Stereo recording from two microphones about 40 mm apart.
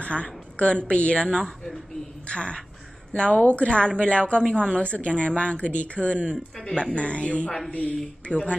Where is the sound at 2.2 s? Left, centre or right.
Left.